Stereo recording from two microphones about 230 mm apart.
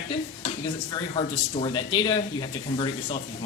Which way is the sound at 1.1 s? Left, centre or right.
Left.